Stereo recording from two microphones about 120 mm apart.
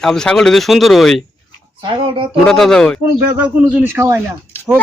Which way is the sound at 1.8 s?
45° right (ahead or behind).